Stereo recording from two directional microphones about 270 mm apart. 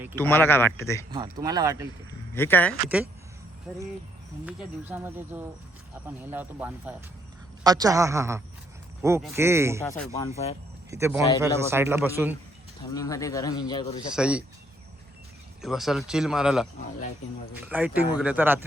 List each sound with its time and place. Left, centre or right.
0.2 s speech: centre
1.1 s a man's voice: centre
2.3 s a man's voice: centre
10.2 s speech: left
10.9 s a man's voice: centre
12.9 s speech: centre
14.1 s speech: centre
15.6 s a man's voice: centre